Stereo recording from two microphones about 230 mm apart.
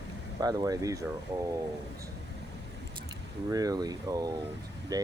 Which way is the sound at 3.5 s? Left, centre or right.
Centre.